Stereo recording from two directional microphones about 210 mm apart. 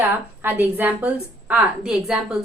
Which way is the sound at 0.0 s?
10° right (ahead or behind).